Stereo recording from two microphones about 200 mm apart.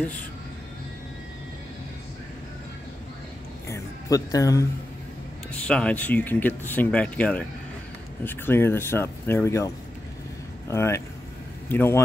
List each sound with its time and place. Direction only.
3.6 s speech: 15° left (ahead or behind)
5.5 s speech: 5° left (ahead or behind)
10.7 s speech: 15° left (ahead or behind)